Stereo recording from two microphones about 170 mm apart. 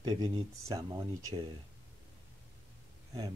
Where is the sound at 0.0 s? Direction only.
25° right (ahead or behind).